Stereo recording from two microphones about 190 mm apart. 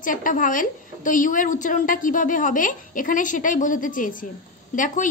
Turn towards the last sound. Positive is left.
turn(degrees=40)  # may be behind; listen again after turning